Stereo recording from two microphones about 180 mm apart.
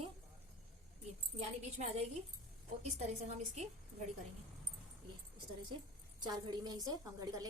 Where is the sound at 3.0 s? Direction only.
35° right (ahead or behind).